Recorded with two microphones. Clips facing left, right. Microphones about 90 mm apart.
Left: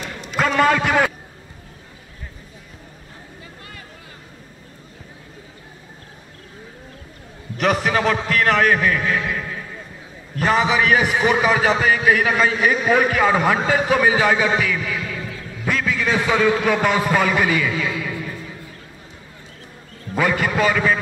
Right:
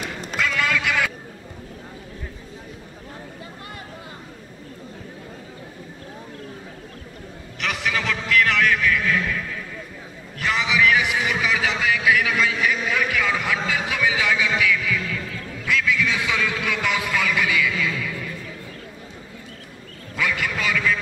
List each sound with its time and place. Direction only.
0.4 s a sound: 40° left (ahead or behind)
7.5 s a man's voice: 40° left (ahead or behind)
20.2 s a man's voice: 40° left (ahead or behind)